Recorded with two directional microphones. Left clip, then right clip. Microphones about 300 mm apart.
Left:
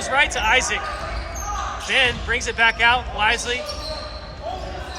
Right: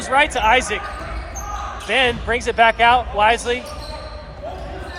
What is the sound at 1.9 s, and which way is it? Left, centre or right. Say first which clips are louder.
Speech: right 2 dB; centre.